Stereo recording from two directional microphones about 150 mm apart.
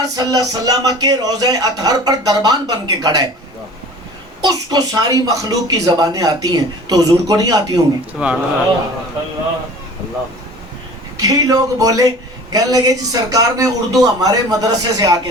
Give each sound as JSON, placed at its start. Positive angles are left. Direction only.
{"t": 0.0, "sound": "a man's voice", "side_deg": -25}
{"t": 4.4, "sound": "a man's voice", "side_deg": -25}
{"t": 8.2, "sound": "speech", "side_deg": -5}
{"t": 11.2, "sound": "a man's voice", "side_deg": -25}